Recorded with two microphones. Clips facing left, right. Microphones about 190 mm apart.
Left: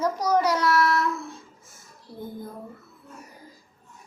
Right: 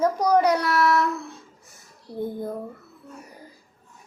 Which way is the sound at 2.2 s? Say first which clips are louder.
Right 7 dB; 65° right (ahead or behind).